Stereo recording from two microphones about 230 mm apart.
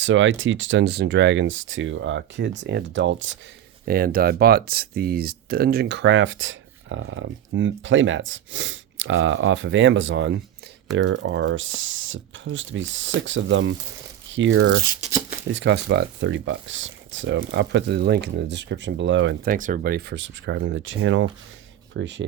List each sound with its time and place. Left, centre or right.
0.0 s speech: right
3.8 s speech: right
19.5 s speech: right